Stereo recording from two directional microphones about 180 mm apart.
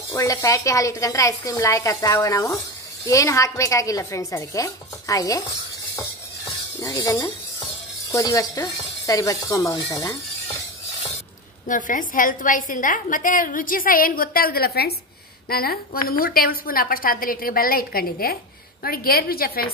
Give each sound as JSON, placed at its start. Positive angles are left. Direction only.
{"t": 0.1, "sound": "a woman's voice", "side_deg": 15}
{"t": 5.9, "sound": "stir", "side_deg": 20}
{"t": 8.1, "sound": "speech", "side_deg": 20}
{"t": 11.6, "sound": "a woman's voice", "side_deg": 45}